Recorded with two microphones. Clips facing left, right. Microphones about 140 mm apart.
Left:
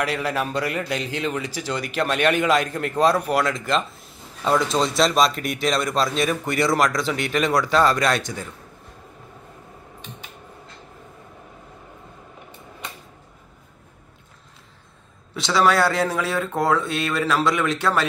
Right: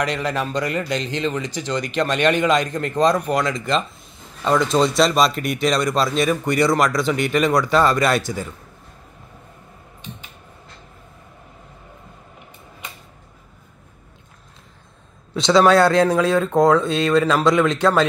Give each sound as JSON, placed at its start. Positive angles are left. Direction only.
{"t": 0.0, "sound": "speech", "side_deg": 5}
{"t": 15.3, "sound": "speech", "side_deg": -20}